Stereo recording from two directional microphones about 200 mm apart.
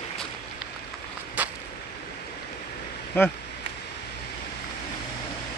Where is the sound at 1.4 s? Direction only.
10° right (ahead or behind).